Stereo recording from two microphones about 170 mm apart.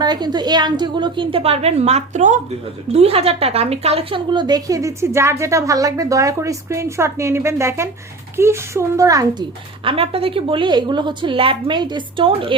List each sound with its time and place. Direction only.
0.0 s a woman's voice: 25° right (ahead or behind)
9.8 s a woman's voice: 35° right (ahead or behind)